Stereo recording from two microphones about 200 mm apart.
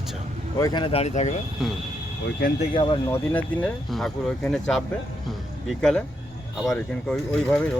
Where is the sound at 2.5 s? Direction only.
25° left (ahead or behind).